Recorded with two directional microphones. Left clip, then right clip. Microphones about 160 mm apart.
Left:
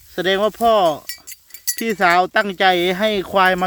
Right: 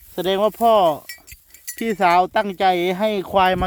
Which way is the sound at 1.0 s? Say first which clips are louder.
Left 4 dB; 40° left (ahead or behind).